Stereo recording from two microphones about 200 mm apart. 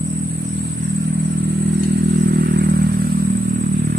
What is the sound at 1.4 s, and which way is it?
Vehicle, 50° right (ahead or behind).